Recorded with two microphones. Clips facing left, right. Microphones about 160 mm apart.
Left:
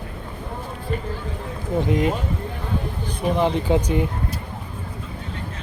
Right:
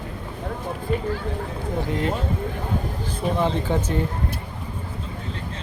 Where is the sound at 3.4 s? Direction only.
15° left (ahead or behind).